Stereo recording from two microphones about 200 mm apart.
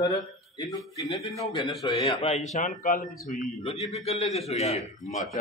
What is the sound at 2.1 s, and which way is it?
A man's voice, 35° left (ahead or behind).